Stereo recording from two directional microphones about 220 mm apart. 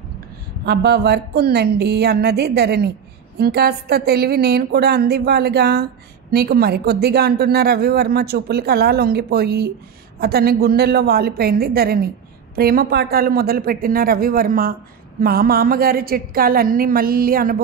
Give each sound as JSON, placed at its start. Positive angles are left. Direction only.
{"t": 0.7, "sound": "a woman's voice", "side_deg": -45}